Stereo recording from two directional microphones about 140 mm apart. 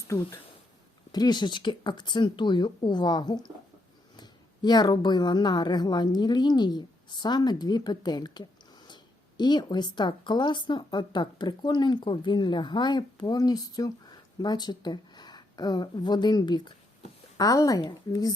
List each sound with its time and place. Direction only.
0.1 s a woman's voice: 20° left (ahead or behind)